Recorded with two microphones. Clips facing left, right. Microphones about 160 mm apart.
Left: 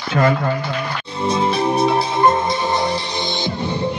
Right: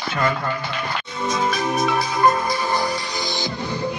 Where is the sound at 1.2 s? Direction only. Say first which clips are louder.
Left 5 dB; 30° left (ahead or behind).